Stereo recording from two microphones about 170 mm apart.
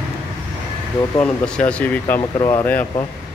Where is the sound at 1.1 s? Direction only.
5° left (ahead or behind).